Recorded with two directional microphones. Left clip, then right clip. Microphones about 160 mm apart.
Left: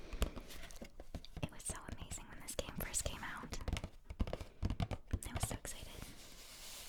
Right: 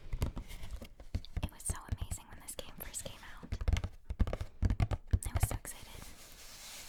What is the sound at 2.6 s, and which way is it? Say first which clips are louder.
Whispering: left 4 dB; 25° left (ahead or behind).